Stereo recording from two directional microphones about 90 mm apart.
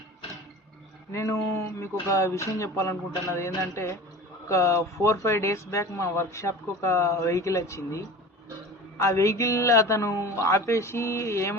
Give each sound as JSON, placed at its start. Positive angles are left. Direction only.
{"t": 1.1, "sound": "speech", "side_deg": 35}